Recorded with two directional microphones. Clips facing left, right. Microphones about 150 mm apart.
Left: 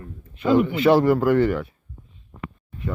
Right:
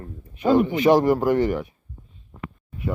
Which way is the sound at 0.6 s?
15° right (ahead or behind).